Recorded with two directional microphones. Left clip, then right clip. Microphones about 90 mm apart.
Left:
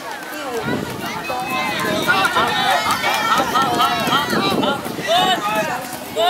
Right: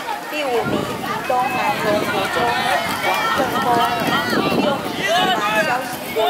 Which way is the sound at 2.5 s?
5° left (ahead or behind).